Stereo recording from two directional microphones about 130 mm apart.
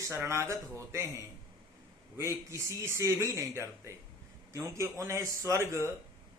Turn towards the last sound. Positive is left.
turn(degrees=-20)  # may be behind; listen again after turning